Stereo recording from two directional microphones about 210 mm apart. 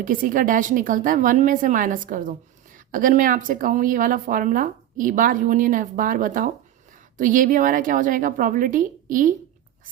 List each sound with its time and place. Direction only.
0.0 s speech: 40° right (ahead or behind)